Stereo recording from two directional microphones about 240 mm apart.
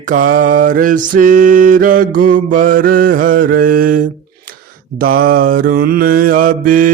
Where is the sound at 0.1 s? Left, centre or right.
Right.